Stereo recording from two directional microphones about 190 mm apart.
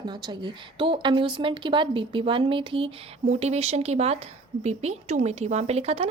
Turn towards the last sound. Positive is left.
turn(degrees=-35)  # may be behind; listen again after turning